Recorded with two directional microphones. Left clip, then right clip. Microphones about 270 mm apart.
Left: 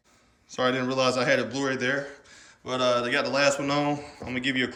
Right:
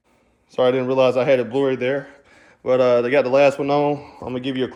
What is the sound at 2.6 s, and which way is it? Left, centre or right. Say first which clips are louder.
A man's voice: right 8 dB; right.